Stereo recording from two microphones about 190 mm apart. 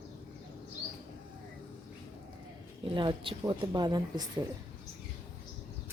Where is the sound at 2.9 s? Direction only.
25° right (ahead or behind).